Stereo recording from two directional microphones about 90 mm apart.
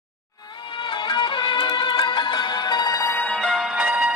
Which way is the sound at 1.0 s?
60° left (ahead or behind).